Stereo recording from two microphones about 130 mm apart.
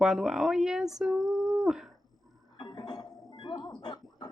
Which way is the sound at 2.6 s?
35° left (ahead or behind).